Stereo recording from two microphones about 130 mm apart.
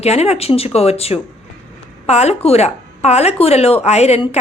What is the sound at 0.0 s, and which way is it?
A woman's voice, 55° left (ahead or behind).